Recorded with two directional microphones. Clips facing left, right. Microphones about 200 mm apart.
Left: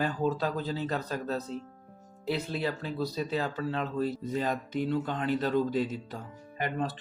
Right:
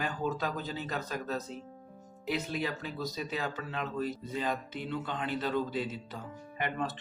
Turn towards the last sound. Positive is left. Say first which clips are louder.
# left 2 dB
turn(degrees=35)  # may be behind; listen again after turning